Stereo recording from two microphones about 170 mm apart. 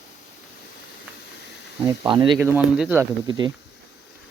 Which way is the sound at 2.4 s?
10° right (ahead or behind).